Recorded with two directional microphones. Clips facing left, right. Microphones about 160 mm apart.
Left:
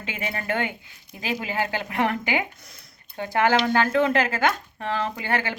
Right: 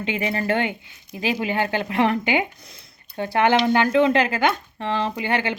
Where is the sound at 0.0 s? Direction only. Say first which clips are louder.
Right 7 dB; 25° right (ahead or behind).